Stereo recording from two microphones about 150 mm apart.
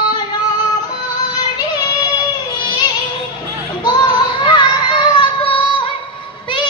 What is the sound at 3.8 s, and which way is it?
Child singing, 30° left (ahead or behind).